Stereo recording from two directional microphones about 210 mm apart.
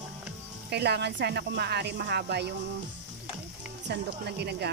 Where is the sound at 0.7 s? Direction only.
50° right (ahead or behind).